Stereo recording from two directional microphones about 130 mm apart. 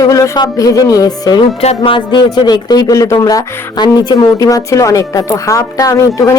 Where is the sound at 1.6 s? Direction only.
50° left (ahead or behind).